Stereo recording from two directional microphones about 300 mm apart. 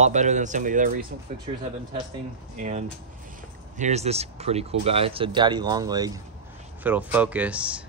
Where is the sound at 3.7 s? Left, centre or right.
Right; by 7.8 s centre.